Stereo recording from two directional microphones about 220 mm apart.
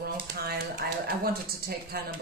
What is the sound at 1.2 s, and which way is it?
Speech, 45° right (ahead or behind).